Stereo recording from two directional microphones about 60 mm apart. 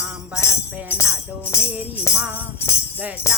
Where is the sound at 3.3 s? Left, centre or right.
Left.